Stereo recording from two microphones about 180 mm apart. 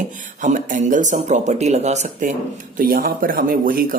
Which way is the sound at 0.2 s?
45° right (ahead or behind).